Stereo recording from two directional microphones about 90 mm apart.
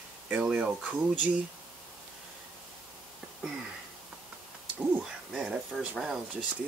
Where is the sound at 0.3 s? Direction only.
20° right (ahead or behind).